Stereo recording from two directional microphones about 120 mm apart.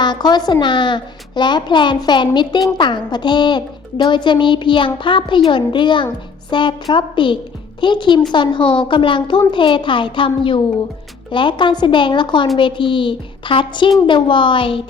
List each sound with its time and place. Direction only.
0.0 s a woman's voice: 35° left (ahead or behind)